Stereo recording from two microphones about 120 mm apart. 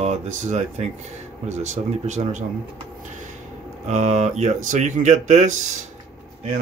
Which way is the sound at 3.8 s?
75° right (ahead or behind).